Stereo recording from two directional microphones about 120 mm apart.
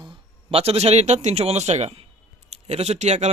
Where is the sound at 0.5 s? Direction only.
55° right (ahead or behind).